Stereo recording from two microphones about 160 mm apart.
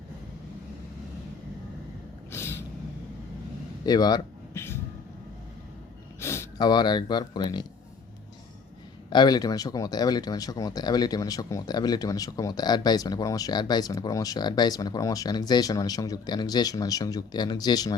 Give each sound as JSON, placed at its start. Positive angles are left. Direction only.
{"t": 2.3, "sound": "vehicle", "side_deg": 15}
{"t": 3.8, "sound": "a sound", "side_deg": 25}
{"t": 6.1, "sound": "speech", "side_deg": 15}
{"t": 9.0, "sound": "speech", "side_deg": 25}